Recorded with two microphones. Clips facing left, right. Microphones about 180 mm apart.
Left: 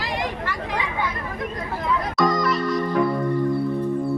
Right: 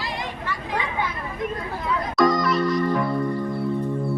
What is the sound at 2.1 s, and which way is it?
Music, centre (ahead or behind).